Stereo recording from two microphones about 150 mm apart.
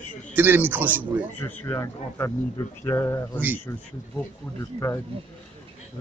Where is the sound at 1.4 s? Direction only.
15° left (ahead or behind).